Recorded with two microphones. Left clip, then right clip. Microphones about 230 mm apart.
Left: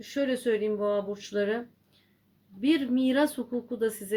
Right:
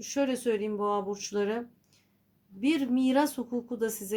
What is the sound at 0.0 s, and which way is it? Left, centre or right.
A woman's voice, right.